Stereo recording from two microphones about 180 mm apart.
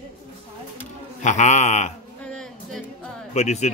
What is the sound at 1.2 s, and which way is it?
Speech, 40° left (ahead or behind).